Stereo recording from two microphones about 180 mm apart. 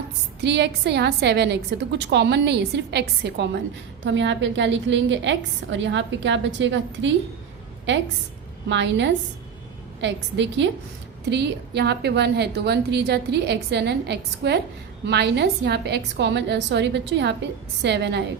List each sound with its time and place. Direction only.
0.4 s a woman's voice: 70° right (ahead or behind)
4.0 s a woman's voice: 90° right
8.7 s a woman's voice: 80° right
11.3 s a woman's voice: 70° right (ahead or behind)